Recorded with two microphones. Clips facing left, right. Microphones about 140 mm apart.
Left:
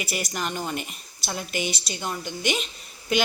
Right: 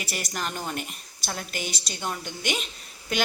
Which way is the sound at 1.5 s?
45° right (ahead or behind).